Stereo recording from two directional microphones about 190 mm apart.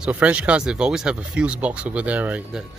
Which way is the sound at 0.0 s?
5° right (ahead or behind).